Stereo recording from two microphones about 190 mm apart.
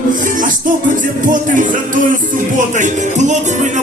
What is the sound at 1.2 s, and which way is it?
Music, 45° right (ahead or behind).